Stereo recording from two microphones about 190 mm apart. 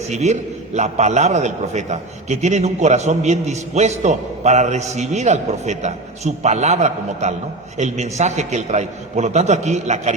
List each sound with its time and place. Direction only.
0.1 s a man's voice: 35° right (ahead or behind)